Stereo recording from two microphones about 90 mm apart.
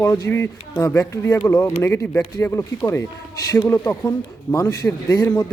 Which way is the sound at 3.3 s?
40° left (ahead or behind).